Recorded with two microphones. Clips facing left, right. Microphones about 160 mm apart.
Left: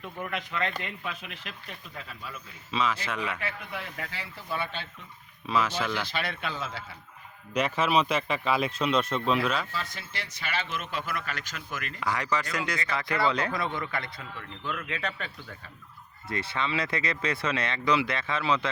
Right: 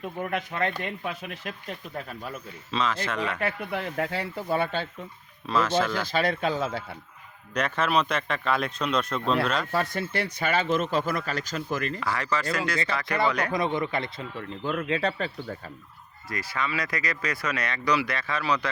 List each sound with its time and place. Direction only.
0.2 s speech: 45° right (ahead or behind)
2.7 s speech: 5° left (ahead or behind)
3.4 s speech: 55° right (ahead or behind)
4.4 s speech: 50° right (ahead or behind)
6.0 s speech: 45° right (ahead or behind)
7.5 s speech: 5° left (ahead or behind)
9.7 s speech: 55° right (ahead or behind); by 11.9 s 35° right (ahead or behind)
11.9 s speech: 15° left (ahead or behind)
13.5 s speech: 20° right (ahead or behind); by 15.7 s 35° right (ahead or behind)
16.3 s speech: 25° left (ahead or behind)